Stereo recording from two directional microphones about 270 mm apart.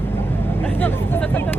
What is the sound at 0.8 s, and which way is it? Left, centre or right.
Hubbub, centre.